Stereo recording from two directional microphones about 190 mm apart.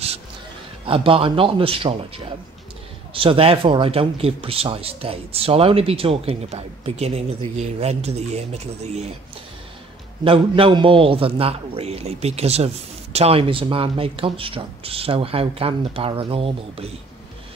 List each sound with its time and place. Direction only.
0.8 s a man's voice: 30° right (ahead or behind)
10.2 s a man's voice: 30° right (ahead or behind)